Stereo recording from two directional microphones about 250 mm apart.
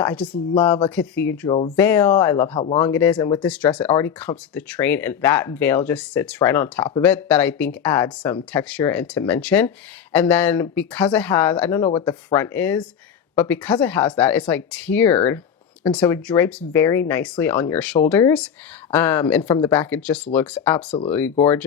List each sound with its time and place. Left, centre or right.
0.0 s speech: centre
1.5 s speech: left
1.7 s speech: centre
3.4 s speech: centre